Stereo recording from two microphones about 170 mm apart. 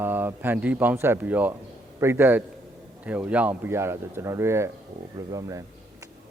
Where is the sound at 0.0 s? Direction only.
10° right (ahead or behind).